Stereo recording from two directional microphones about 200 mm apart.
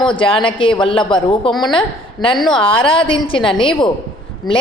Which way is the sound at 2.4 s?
5° left (ahead or behind).